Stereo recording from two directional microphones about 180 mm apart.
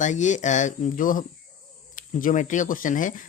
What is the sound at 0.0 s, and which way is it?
Speech, 45° left (ahead or behind).